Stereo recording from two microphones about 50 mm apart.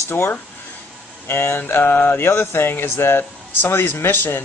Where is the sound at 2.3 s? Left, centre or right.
Left.